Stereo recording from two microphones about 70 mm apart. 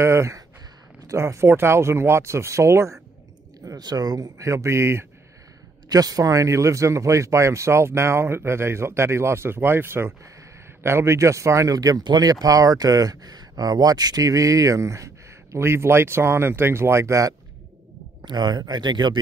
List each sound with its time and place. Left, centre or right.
0.0 s speech: right
3.6 s speech: right
4.4 s speech: right
5.9 s speech: right
18.2 s speech: right